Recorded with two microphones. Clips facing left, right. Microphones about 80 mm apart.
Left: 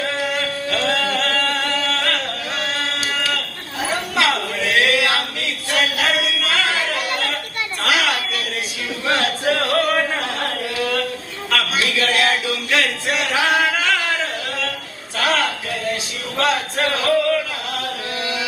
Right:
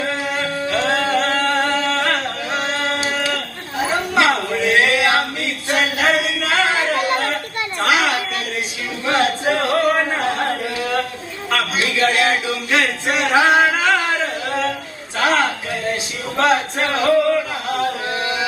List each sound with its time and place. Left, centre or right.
0.0 s singing: right
7.8 s a sound: right
16.4 s chant: right